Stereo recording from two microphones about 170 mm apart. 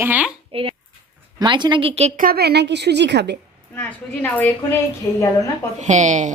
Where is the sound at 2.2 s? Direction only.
65° right (ahead or behind); by 3.4 s 90° right.